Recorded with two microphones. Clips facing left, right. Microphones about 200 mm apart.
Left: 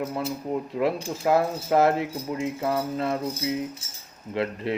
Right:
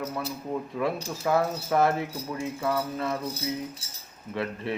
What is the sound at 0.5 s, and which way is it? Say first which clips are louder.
Speech: left 3 dB; 25° left (ahead or behind).